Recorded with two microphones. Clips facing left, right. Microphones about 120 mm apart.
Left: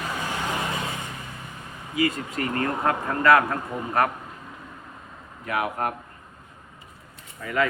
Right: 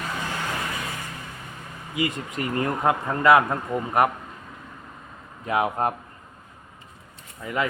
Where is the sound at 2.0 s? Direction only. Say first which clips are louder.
Left 2 dB; 20° right (ahead or behind).